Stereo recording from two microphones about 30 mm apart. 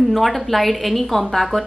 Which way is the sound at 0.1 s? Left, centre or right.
Centre.